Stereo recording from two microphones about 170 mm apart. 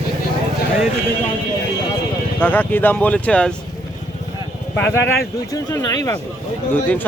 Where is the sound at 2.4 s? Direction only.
10° left (ahead or behind).